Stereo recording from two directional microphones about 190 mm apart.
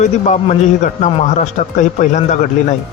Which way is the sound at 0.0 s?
40° left (ahead or behind).